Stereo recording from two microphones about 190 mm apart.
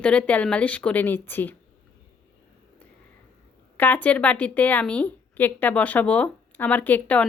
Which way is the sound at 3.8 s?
10° left (ahead or behind).